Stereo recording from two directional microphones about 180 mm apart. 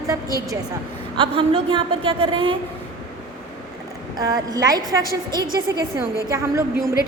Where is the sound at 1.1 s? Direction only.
25° right (ahead or behind).